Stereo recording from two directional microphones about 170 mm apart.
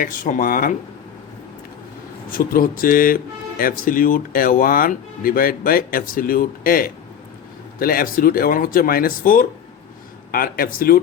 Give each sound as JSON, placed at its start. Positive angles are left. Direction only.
{"t": 0.0, "sound": "speech", "side_deg": 55}
{"t": 2.4, "sound": "speech", "side_deg": 55}